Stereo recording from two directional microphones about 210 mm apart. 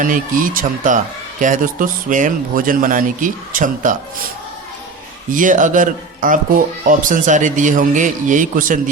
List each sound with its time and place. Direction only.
0.0 s a man's voice: 40° right (ahead or behind)
5.3 s a man's voice: 40° right (ahead or behind)